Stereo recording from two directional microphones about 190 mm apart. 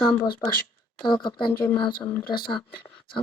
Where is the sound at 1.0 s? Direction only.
25° left (ahead or behind).